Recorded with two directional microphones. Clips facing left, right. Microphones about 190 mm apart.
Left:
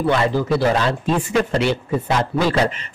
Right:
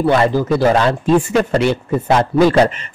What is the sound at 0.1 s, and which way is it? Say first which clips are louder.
Speech: right 2 dB; 50° right (ahead or behind).